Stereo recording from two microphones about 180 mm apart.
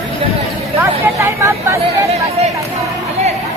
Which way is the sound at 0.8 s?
15° right (ahead or behind).